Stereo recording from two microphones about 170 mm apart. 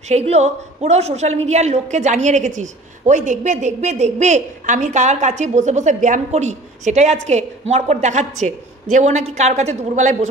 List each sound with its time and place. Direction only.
0.1 s a woman's voice: 40° right (ahead or behind)